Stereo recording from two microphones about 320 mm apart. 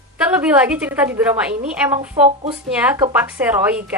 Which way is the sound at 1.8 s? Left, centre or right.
Centre.